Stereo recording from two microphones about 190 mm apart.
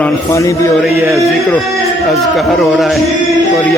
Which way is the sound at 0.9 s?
15° right (ahead or behind).